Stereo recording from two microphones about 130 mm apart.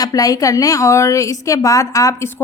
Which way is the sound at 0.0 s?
30° left (ahead or behind).